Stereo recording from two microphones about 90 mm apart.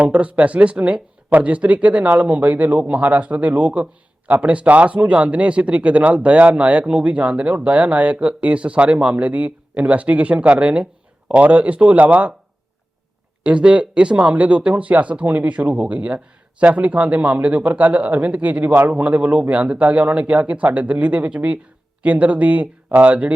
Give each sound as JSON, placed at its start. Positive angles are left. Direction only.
{"t": 0.0, "sound": "speech", "side_deg": -15}
{"t": 13.4, "sound": "speech", "side_deg": -10}